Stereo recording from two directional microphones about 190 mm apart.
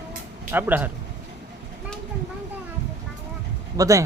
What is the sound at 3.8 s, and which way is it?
Speech, 15° right (ahead or behind).